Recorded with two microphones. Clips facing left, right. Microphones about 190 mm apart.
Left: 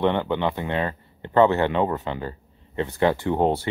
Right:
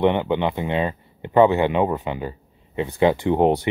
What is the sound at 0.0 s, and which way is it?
Speech, 15° right (ahead or behind).